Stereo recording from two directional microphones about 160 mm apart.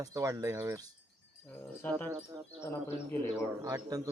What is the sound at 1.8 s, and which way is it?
Speech, 15° left (ahead or behind).